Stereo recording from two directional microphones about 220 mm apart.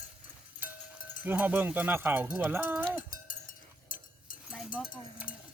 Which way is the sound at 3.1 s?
40° left (ahead or behind).